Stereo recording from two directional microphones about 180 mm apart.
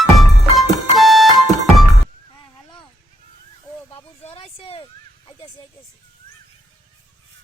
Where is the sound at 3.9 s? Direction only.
30° left (ahead or behind).